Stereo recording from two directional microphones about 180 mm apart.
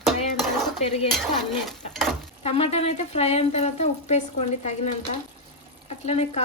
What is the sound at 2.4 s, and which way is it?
Speech, 35° left (ahead or behind).